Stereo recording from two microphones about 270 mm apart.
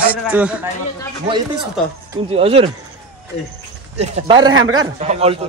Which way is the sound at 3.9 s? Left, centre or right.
Right.